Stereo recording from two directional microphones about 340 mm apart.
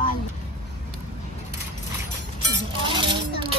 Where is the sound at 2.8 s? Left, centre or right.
Centre.